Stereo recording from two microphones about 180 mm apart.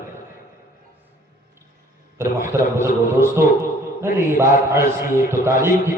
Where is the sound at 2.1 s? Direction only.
15° right (ahead or behind).